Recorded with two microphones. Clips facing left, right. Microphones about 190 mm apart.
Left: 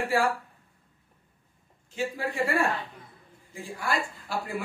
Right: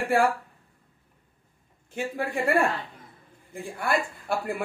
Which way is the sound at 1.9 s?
55° right (ahead or behind).